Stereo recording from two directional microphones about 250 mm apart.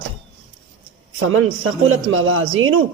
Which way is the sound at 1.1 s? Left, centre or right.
Right.